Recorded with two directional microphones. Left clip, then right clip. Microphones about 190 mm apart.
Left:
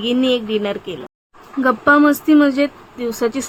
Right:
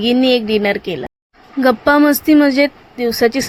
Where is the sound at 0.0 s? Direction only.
25° right (ahead or behind).